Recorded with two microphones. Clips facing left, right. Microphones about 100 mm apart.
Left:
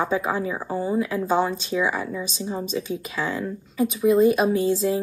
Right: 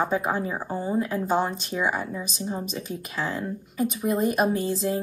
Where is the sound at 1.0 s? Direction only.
35° right (ahead or behind).